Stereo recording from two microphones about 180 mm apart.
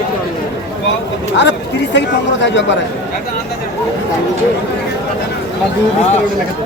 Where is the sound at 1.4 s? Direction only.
75° left (ahead or behind).